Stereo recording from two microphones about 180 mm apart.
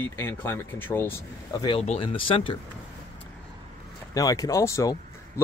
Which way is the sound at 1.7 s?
35° left (ahead or behind).